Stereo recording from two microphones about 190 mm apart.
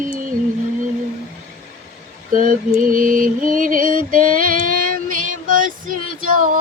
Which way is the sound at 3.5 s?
45° right (ahead or behind).